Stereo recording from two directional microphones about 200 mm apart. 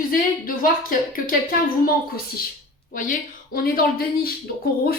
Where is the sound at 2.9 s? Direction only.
40° left (ahead or behind).